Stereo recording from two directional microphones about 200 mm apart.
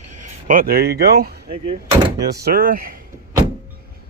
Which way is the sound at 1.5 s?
25° right (ahead or behind).